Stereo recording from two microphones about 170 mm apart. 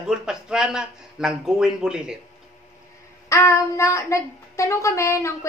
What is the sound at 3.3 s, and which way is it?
Speech, 15° left (ahead or behind).